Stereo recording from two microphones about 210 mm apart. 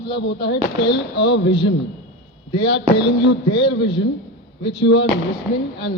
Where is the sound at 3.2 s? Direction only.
50° left (ahead or behind).